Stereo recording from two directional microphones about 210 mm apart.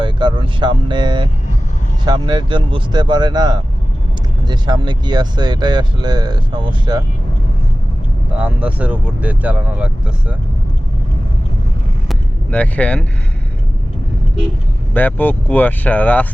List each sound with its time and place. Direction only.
0.0 s speech: 20° right (ahead or behind)
8.4 s speech: 5° right (ahead or behind)
12.0 s vehicle: 5° left (ahead or behind)
14.9 s speech: 10° left (ahead or behind)